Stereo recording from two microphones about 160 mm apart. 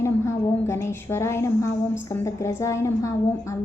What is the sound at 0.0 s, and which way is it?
A woman's voice, 15° left (ahead or behind).